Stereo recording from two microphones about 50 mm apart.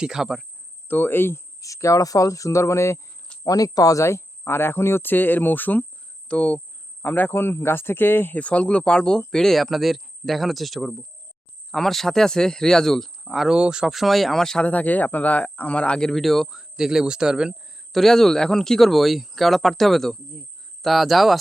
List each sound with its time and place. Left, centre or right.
0.0 s speech: centre
0.9 s speech: left
1.6 s speech: left
3.3 s cricket: left
3.9 s speech: left
6.2 s speech: left
7.0 s speech: left
8.4 s speech: left; by 13.5 s centre
13.5 s speech: centre
13.9 s speech: centre
14.6 s speech: left; by 16.2 s centre
16.2 s speech: centre
16.6 s speech: centre
17.9 s speech: centre